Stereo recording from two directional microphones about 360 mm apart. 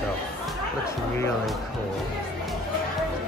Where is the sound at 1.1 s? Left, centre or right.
Centre.